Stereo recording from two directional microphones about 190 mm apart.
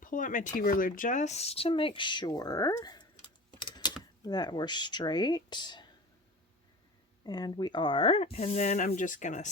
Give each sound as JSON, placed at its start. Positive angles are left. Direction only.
{"t": 0.0, "sound": "speech", "side_deg": 45}
{"t": 7.3, "sound": "speech", "side_deg": 20}